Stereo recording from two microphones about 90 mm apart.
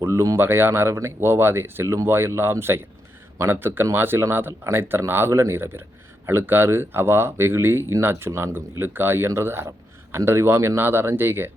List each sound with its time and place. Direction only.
0.0 s speech: 30° right (ahead or behind)